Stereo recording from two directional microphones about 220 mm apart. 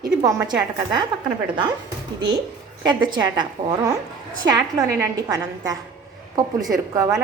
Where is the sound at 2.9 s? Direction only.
20° right (ahead or behind).